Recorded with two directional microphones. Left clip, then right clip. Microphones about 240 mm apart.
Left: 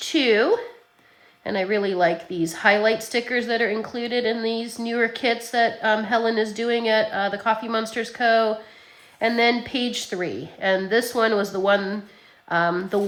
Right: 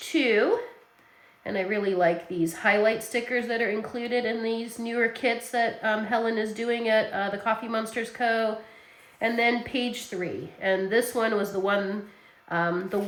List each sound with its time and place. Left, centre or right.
0.0 s speech: centre
1.5 s a woman's voice: centre